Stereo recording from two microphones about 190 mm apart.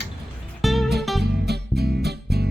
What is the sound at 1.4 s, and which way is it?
Music, 60° right (ahead or behind).